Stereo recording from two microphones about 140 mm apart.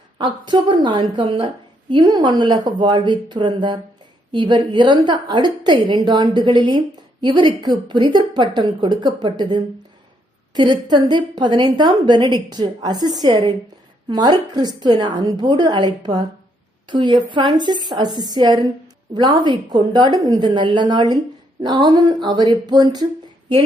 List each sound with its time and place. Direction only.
0.2 s a woman's voice: 35° right (ahead or behind)